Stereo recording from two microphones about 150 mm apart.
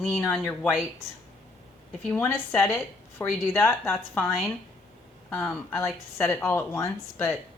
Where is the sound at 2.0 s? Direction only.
15° left (ahead or behind).